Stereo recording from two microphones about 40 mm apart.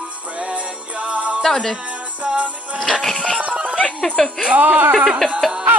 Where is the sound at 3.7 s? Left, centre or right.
Centre.